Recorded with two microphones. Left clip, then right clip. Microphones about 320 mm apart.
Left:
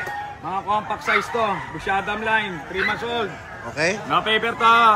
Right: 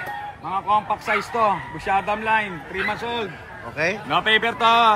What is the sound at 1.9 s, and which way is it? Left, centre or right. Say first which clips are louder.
Speech: right 1 dB; right.